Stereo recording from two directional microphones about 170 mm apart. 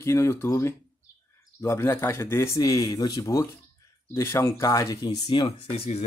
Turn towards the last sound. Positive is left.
turn(degrees=40)  # may be behind; listen again after turning